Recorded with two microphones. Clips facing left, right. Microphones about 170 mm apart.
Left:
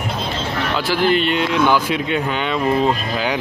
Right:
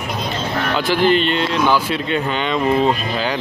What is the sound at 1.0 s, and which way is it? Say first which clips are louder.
Speech: even; 10° left (ahead or behind).